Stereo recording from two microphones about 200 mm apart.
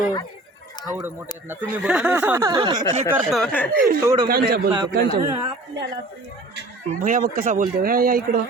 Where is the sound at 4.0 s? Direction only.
15° right (ahead or behind).